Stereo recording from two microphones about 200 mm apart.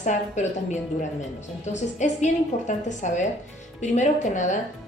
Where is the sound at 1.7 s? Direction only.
35° left (ahead or behind).